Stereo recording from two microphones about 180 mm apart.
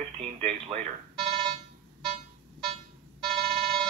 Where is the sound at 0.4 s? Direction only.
40° right (ahead or behind).